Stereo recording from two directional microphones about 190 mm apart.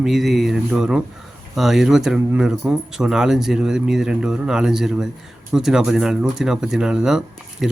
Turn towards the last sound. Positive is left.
turn(degrees=0)  # may be behind; listen again after turning